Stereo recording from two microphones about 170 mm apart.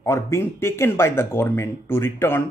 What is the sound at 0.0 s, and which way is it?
Speech, 15° left (ahead or behind).